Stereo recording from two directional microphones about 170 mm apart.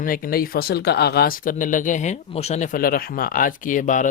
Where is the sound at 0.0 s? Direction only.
55° left (ahead or behind).